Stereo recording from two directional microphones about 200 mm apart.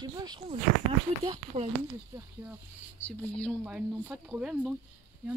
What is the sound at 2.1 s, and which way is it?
Speech, 15° right (ahead or behind).